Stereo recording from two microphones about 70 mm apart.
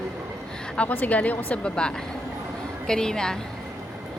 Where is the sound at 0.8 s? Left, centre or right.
Left.